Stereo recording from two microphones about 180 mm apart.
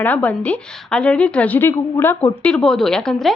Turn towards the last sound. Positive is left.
turn(degrees=0)  # may be behind; listen again after turning